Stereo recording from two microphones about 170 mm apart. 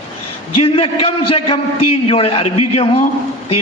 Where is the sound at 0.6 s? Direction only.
35° left (ahead or behind).